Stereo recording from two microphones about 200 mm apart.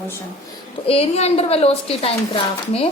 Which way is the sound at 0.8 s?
30° left (ahead or behind).